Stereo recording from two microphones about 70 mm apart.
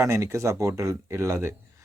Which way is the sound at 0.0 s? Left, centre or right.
Right.